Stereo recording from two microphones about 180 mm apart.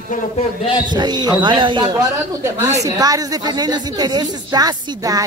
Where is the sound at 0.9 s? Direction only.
25° right (ahead or behind).